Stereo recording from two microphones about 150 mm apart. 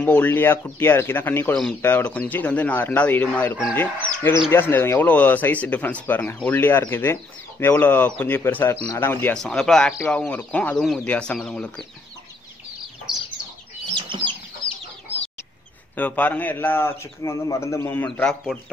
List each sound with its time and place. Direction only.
0.0 s a man's voice: 10° left (ahead or behind)
13.9 s chicken: 35° right (ahead or behind)
16.0 s a man's voice: 10° left (ahead or behind)